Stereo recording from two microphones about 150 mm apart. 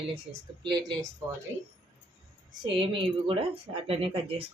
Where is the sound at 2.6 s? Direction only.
35° right (ahead or behind).